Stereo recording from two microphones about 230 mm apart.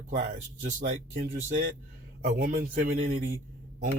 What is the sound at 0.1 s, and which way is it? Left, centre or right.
A man's voice, right.